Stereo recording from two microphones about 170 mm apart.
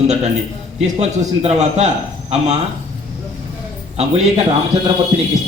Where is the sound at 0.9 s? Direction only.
40° right (ahead or behind).